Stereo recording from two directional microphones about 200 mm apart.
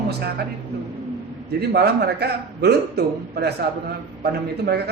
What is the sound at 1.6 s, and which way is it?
A man's voice, 55° right (ahead or behind).